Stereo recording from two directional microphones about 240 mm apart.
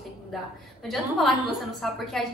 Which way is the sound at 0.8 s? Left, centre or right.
Centre.